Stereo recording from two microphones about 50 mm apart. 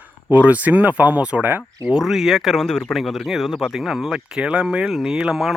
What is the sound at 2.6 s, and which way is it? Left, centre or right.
A man's voice, centre.